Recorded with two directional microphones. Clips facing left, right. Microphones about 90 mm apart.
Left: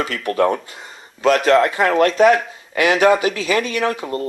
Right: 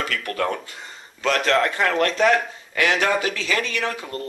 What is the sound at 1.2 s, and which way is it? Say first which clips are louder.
Speech: left 6 dB; 5° left (ahead or behind).